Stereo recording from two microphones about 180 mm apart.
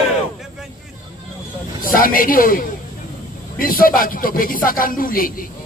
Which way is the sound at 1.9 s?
50° left (ahead or behind).